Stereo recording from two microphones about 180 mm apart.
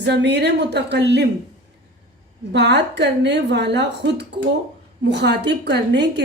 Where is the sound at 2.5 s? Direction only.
70° right (ahead or behind).